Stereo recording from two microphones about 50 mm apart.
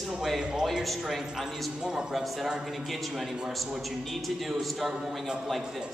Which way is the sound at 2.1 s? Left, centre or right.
Centre.